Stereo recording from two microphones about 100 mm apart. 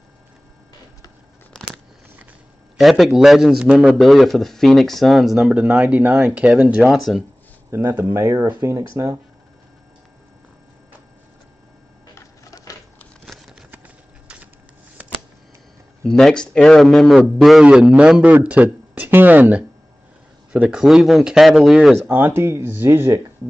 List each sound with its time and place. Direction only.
2.8 s a man's voice: centre (ahead or behind)
7.7 s speech: 20° right (ahead or behind)
12.2 s printer: 35° left (ahead or behind)
13.2 s a sound: centre (ahead or behind)
13.7 s a sound: 15° right (ahead or behind)
16.0 s a man's voice: 5° left (ahead or behind); by 20.8 s 15° right (ahead or behind)
20.8 s a man's voice: centre (ahead or behind)
22.0 s speech: 25° right (ahead or behind)